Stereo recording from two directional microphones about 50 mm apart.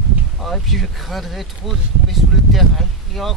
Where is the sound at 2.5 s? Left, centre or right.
Centre.